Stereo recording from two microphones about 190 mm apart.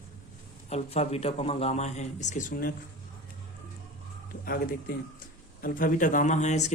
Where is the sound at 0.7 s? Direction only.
35° left (ahead or behind).